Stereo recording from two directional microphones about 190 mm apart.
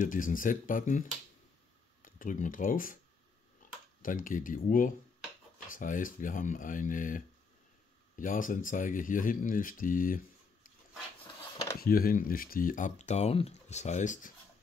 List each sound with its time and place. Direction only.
0.0 s speech: 45° left (ahead or behind)
2.0 s speech: 45° left (ahead or behind)
4.0 s speech: 45° left (ahead or behind)
11.8 s speech: 50° left (ahead or behind)